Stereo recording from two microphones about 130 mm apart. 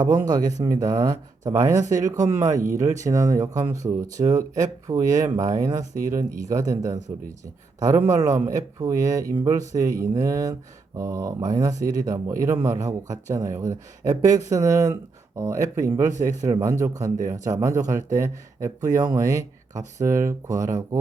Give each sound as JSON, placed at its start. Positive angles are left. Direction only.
{"t": 0.0, "sound": "speech", "side_deg": -30}